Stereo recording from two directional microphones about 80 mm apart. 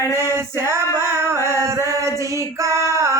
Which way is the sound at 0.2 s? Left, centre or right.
Right.